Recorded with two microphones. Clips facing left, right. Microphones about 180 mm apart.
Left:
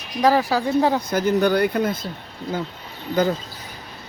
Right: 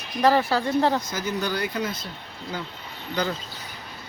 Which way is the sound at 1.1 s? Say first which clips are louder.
Left 9 dB; 60° left (ahead or behind).